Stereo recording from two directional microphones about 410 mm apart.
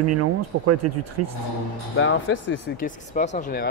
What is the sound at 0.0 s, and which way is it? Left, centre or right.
Speech, right.